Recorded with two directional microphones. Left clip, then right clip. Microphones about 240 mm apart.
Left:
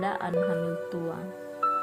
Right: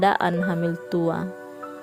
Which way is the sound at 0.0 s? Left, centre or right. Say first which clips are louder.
Right 7 dB; right.